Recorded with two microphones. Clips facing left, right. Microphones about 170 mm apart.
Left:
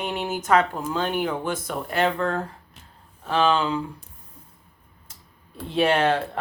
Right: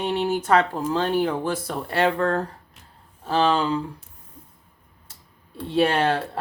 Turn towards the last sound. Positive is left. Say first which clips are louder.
# left 1 dB
turn(degrees=-30)  # may be behind; listen again after turning